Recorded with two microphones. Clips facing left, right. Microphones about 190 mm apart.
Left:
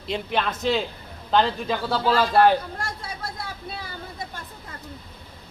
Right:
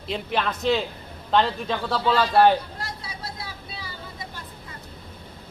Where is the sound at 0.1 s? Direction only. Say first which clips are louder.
Left 1 dB; centre (ahead or behind).